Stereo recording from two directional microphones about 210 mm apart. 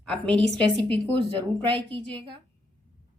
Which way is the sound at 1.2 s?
25° right (ahead or behind).